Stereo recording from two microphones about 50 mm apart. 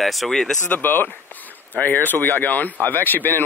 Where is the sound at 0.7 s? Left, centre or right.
Left.